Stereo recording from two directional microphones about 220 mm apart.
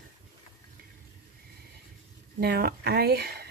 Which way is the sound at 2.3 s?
45° right (ahead or behind).